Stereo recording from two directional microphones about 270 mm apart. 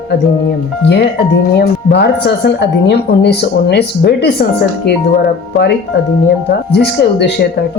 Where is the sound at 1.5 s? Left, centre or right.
Left.